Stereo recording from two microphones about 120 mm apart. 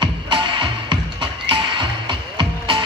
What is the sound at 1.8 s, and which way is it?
Music, 45° right (ahead or behind).